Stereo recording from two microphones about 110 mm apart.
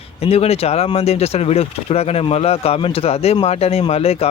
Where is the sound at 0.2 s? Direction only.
65° left (ahead or behind).